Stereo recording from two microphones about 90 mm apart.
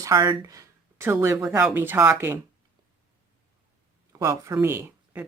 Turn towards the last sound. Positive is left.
turn(degrees=-25)  # may be behind; listen again after turning